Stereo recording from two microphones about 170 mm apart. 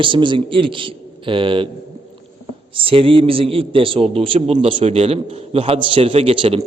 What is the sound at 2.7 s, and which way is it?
A man's voice, 30° right (ahead or behind).